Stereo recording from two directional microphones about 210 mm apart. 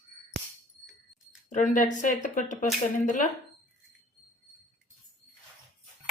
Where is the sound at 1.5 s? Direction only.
35° left (ahead or behind).